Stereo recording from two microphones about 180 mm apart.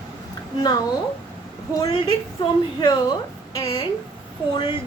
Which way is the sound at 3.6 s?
25° left (ahead or behind).